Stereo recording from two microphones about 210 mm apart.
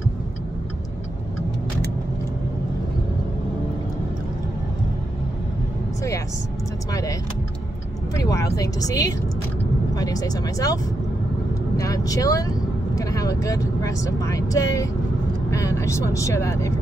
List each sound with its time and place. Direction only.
6.9 s speech: 15° left (ahead or behind)